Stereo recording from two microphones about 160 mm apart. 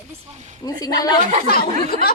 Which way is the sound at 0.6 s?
25° left (ahead or behind).